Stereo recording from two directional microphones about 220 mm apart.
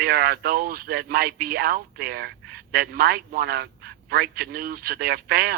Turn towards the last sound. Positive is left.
turn(degrees=-45)  # may be behind; listen again after turning